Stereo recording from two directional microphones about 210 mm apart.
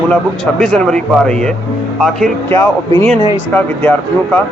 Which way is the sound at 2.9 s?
25° right (ahead or behind).